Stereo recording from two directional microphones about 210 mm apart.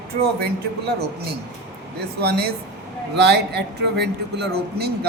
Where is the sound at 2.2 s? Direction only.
50° right (ahead or behind).